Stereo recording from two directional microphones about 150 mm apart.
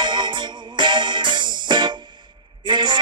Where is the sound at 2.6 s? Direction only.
30° right (ahead or behind).